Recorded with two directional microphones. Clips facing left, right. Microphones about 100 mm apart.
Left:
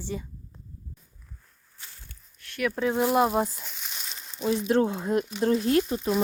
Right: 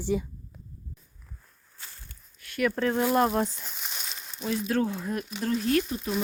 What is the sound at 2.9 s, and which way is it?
Speech, 15° left (ahead or behind).